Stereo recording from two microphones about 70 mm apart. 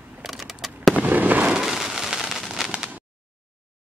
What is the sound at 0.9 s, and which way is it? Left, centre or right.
Fireworks, right.